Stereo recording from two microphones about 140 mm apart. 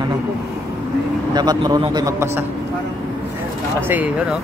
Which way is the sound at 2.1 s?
20° right (ahead or behind).